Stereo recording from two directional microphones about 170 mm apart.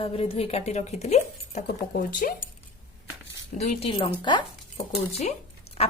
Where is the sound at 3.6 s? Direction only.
35° left (ahead or behind).